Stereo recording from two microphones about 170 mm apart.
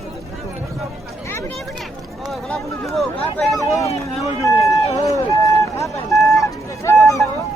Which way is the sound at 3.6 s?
20° left (ahead or behind).